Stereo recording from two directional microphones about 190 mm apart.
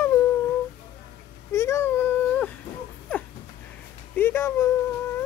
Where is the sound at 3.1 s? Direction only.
5° left (ahead or behind).